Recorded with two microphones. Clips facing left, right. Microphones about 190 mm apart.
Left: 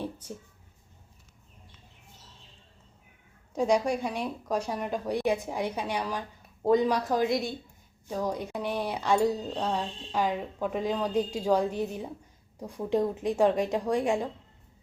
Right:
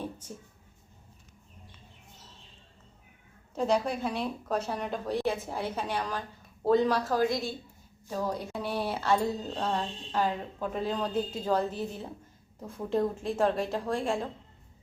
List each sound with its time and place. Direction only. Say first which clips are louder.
3.5 s speech: left 2 dB; 10° left (ahead or behind)